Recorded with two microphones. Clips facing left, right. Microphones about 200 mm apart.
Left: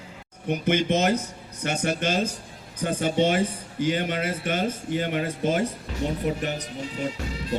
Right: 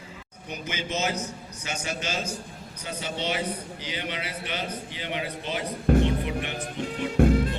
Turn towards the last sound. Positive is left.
turn(degrees=-55)  # may be behind; listen again after turning